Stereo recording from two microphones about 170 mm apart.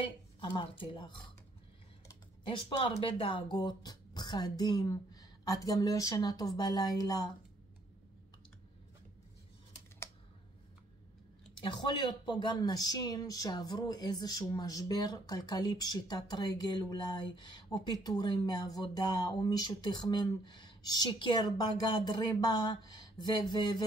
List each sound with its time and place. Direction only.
0.0 s speech: 30° left (ahead or behind)
2.4 s speech: 30° left (ahead or behind)
11.6 s speech: 25° left (ahead or behind)